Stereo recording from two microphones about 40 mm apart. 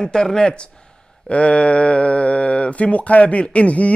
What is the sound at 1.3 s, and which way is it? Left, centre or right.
Speech, left.